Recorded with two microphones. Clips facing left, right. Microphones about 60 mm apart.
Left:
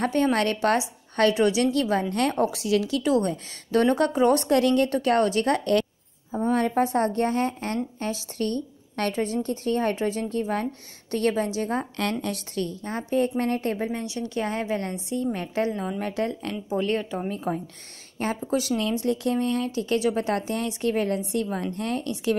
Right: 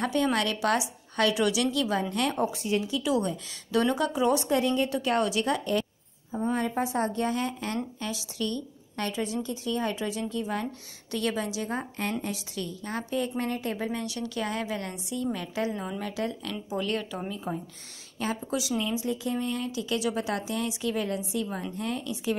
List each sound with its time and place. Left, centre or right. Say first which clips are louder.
0.0 s a woman's voice: left 4 dB; left
2.5 s speech: left 4 dB; left
3.0 s a woman's voice: left 4 dB; left
4.9 s a woman's voice: left 5 dB; left
12.0 s a woman's voice: left 4 dB; left
12.8 s a woman's voice: left 5 dB; left
13.4 s a woman's voice: left 5 dB; left
13.9 s a woman's voice: left 3 dB; left
16.6 s a woman's voice: left 5 dB; left